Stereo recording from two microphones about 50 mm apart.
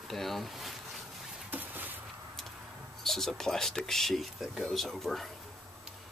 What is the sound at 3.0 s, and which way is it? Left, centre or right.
Speech, centre.